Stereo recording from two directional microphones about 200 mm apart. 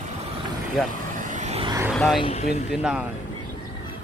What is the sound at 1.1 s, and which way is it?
Vehicle, 40° right (ahead or behind).